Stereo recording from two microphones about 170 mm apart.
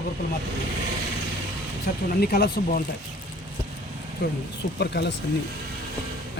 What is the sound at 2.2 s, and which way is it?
Speech, 65° left (ahead or behind).